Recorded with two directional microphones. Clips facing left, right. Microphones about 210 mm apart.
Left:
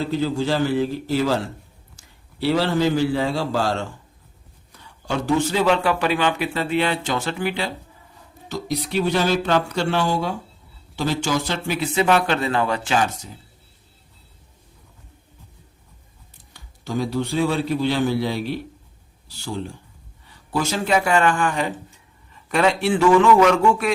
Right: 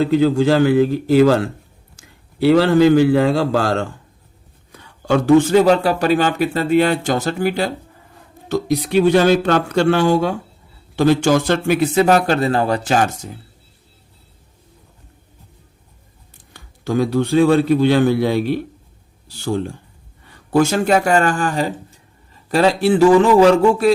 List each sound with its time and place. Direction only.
0.0 s a man's voice: 60° right (ahead or behind); by 7.7 s 40° right (ahead or behind)
8.1 s speech: 55° right (ahead or behind)
16.5 s speech: 55° right (ahead or behind); by 23.9 s 35° right (ahead or behind)